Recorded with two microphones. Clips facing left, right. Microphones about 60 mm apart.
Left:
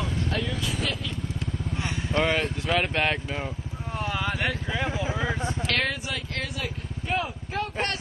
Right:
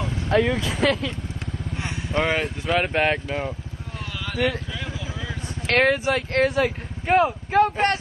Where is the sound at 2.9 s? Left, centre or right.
Centre.